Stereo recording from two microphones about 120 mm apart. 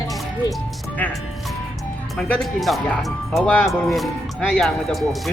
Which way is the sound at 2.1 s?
10° left (ahead or behind).